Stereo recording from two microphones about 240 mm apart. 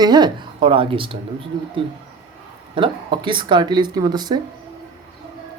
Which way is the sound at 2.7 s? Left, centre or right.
Right.